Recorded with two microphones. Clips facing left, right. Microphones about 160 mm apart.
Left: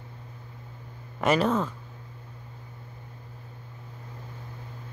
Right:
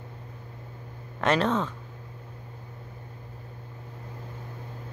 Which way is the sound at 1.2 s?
5° left (ahead or behind).